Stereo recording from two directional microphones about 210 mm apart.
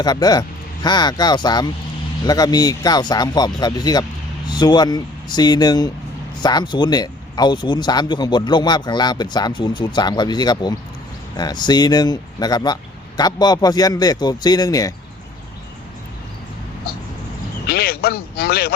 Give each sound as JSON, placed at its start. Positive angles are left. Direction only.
{"t": 0.0, "sound": "speech", "side_deg": 20}
{"t": 17.7, "sound": "speech", "side_deg": 50}